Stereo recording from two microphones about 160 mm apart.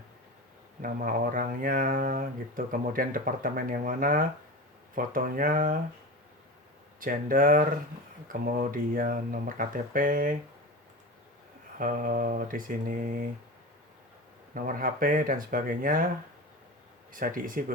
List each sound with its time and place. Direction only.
0.8 s speech: 65° right (ahead or behind)
7.0 s speech: 60° right (ahead or behind)
11.8 s speech: 60° right (ahead or behind)
14.5 s speech: 60° right (ahead or behind)
17.1 s speech: 60° right (ahead or behind)